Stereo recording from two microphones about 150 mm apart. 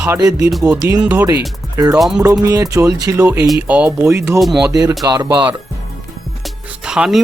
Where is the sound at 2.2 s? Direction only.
20° right (ahead or behind).